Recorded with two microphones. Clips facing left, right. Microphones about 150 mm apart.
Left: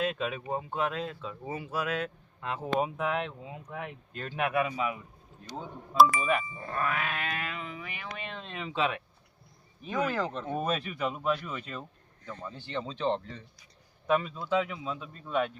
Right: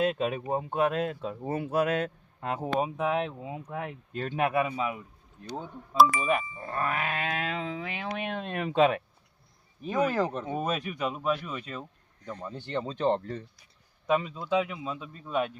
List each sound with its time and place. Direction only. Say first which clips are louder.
0.0 s a sound: right 4 dB; 40° right (ahead or behind)
0.8 s speech: right 8 dB; 45° right (ahead or behind)
3.0 s speech: right 3 dB; 25° right (ahead or behind)
6.0 s speech: even; centre (ahead or behind)
6.7 s a sound: right 1 dB; 35° right (ahead or behind)
7.3 s music: right 6 dB; 90° right
8.1 s speech: right 8 dB; 60° right (ahead or behind)
9.8 s a sound: right 3 dB; 35° right (ahead or behind)
10.2 s a man's voice: right 3 dB; 10° right (ahead or behind)
11.8 s a sound: right 2 dB; 15° right (ahead or behind)
12.5 s speech: right 4 dB; 55° right (ahead or behind)
14.1 s a man's voice: right 1 dB; 15° right (ahead or behind)